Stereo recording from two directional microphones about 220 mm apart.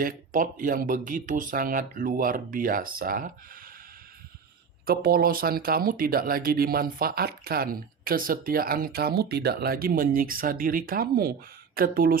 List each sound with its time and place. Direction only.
0.0 s speech: 40° right (ahead or behind)
4.9 s speech: 40° right (ahead or behind)